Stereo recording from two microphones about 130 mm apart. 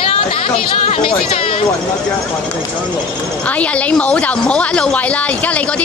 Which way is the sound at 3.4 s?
10° left (ahead or behind).